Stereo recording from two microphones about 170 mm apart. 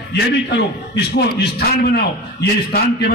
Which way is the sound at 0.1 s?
80° left.